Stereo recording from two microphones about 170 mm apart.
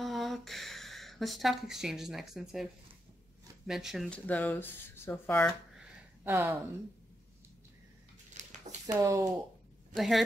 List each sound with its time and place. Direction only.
0.0 s speech: centre (ahead or behind)
6.2 s speech: 10° right (ahead or behind)
8.3 s a sound: 45° right (ahead or behind)
8.9 s speech: 20° right (ahead or behind)
9.9 s speech: centre (ahead or behind)